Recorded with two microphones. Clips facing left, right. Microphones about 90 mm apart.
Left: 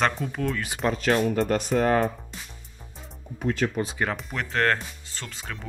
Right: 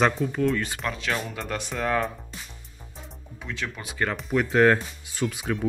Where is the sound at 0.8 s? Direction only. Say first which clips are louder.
Left 6 dB; 45° left (ahead or behind).